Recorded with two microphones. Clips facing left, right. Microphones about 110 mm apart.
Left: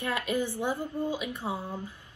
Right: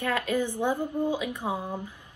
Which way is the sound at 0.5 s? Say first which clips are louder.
Right 4 dB; 15° right (ahead or behind).